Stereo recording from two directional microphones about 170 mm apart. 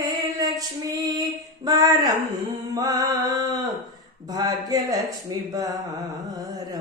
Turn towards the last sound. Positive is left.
turn(degrees=-20)  # may be behind; listen again after turning